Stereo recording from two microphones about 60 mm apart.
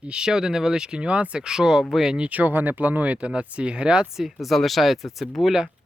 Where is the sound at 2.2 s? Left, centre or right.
Right.